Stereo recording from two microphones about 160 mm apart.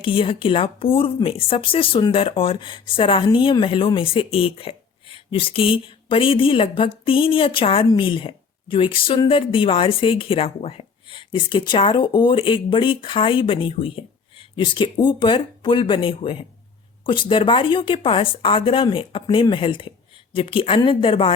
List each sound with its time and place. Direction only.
0.0 s speech: 35° left (ahead or behind)